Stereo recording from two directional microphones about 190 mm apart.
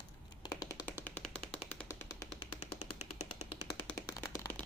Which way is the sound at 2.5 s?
35° left (ahead or behind).